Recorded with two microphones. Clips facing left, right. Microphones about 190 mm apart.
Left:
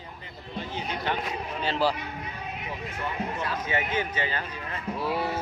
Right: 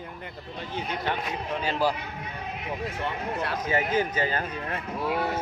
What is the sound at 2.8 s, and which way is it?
Speech, 65° right (ahead or behind).